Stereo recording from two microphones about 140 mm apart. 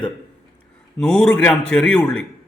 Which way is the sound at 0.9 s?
5° left (ahead or behind).